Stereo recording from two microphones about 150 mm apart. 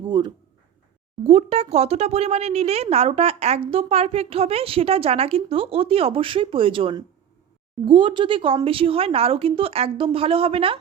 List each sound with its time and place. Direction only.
0.1 s speech: 30° right (ahead or behind)
1.3 s a woman's voice: 45° right (ahead or behind)